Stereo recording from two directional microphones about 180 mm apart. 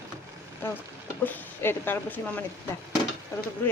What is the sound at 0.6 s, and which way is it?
Speech, 10° left (ahead or behind).